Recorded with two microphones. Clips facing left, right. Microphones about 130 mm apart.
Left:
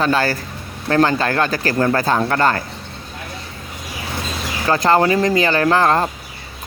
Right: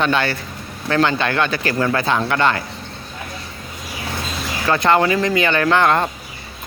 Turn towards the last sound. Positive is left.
turn(degrees=35)  # may be behind; listen again after turning